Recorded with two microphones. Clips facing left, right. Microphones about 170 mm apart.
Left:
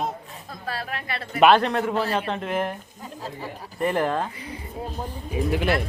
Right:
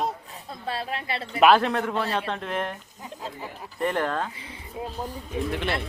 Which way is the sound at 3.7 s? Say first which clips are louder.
Left 3 dB; 5° left (ahead or behind).